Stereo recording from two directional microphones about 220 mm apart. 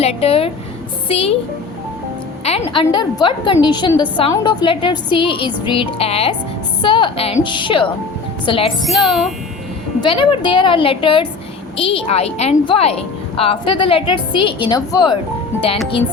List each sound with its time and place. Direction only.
0.0 s a woman's voice: 25° left (ahead or behind)
2.4 s a woman's voice: 30° left (ahead or behind)
8.8 s speech: centre (ahead or behind)
10.0 s a woman's voice: 20° left (ahead or behind)